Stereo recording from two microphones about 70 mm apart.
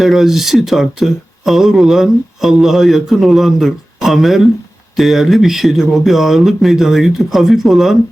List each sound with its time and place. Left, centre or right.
0.0 s speech: centre